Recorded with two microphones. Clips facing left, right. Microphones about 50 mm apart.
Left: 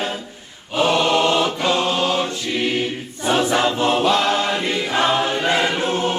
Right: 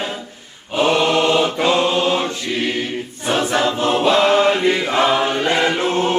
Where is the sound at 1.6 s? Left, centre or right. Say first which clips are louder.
Right 3 dB; right.